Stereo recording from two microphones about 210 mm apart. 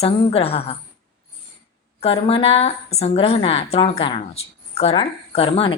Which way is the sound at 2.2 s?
30° left (ahead or behind).